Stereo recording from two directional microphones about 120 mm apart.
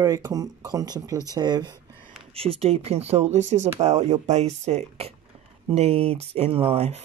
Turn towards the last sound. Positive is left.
turn(degrees=-60)  # may be behind; listen again after turning